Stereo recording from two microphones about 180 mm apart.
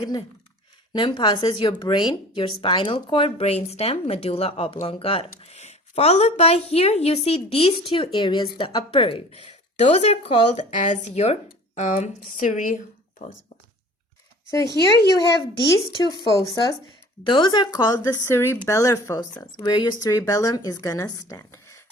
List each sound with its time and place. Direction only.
0.9 s speech: 25° left (ahead or behind); by 13.3 s 40° left (ahead or behind)
14.9 s speech: 20° left (ahead or behind)